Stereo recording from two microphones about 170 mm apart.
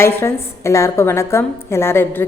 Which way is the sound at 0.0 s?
15° left (ahead or behind).